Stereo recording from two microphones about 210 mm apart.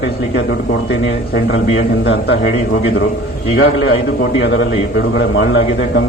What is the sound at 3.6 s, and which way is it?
A man's voice, 60° left (ahead or behind).